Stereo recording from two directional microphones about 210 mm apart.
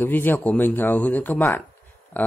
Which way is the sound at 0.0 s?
10° left (ahead or behind).